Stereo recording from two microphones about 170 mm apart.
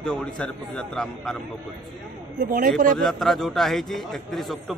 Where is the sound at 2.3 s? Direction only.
55° right (ahead or behind).